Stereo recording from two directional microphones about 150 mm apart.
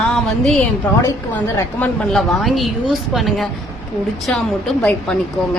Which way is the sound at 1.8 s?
Centre (ahead or behind).